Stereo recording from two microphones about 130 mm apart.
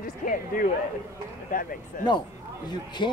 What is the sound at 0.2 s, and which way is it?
Speech, 90° left.